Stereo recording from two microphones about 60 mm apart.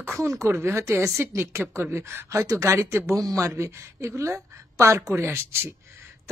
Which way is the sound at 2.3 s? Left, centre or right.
Right.